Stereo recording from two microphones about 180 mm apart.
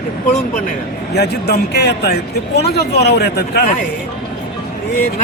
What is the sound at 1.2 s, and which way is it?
Speech, 60° left (ahead or behind).